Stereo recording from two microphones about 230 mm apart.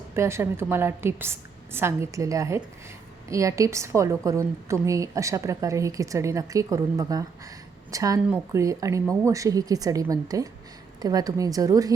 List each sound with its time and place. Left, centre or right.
0.2 s speech: centre